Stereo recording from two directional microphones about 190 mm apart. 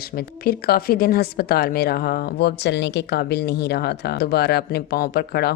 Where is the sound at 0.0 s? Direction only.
55° left (ahead or behind).